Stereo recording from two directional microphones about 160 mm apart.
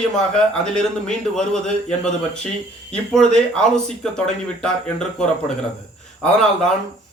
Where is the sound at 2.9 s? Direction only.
5° left (ahead or behind).